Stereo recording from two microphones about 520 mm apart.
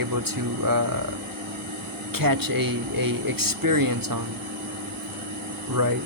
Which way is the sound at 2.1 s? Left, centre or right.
Right.